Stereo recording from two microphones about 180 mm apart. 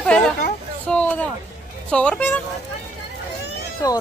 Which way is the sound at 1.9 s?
5° left (ahead or behind).